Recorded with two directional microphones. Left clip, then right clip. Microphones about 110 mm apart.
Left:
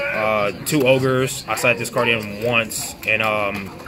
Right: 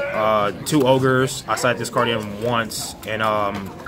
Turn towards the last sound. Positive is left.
turn(degrees=0)  # may be behind; listen again after turning